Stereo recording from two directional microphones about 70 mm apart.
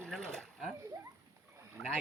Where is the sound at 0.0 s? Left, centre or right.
Centre.